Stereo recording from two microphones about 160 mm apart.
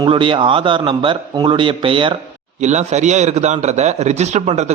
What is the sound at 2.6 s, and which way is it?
A man's voice, 45° right (ahead or behind).